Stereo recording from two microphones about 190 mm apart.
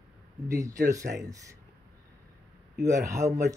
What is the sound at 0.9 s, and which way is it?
Speech, 15° right (ahead or behind).